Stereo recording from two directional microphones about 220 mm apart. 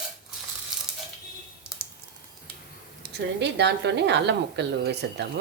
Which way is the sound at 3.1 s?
50° right (ahead or behind).